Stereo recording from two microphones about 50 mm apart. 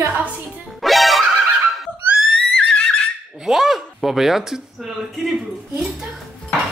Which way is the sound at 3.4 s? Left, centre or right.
Centre.